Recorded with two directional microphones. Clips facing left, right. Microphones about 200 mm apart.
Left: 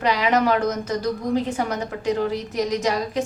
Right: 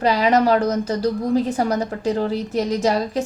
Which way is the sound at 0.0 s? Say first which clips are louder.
Right 3 dB; 35° right (ahead or behind).